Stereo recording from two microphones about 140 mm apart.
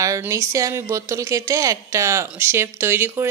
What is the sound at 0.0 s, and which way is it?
A woman's voice, 25° right (ahead or behind).